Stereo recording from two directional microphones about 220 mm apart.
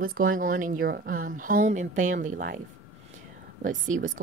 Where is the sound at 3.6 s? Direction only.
35° right (ahead or behind).